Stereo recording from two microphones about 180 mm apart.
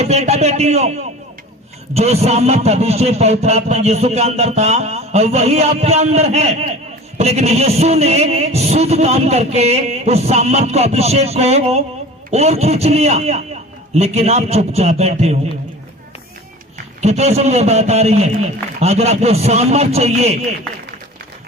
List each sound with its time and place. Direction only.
0.0 s a man's voice: 35° right (ahead or behind)
16.7 s a man's voice: 40° right (ahead or behind)